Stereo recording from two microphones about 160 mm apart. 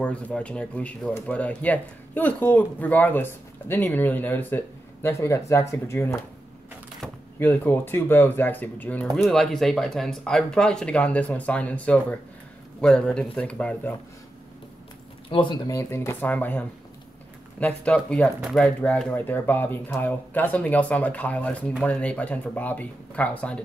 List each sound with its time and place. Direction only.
0.0 s speech: 5° left (ahead or behind)
7.3 s speech: 10° left (ahead or behind)
15.2 s speech: 30° left (ahead or behind)
15.7 s speech: 20° left (ahead or behind)